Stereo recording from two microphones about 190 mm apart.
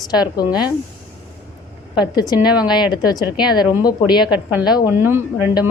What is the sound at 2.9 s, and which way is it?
A woman's voice, 20° left (ahead or behind).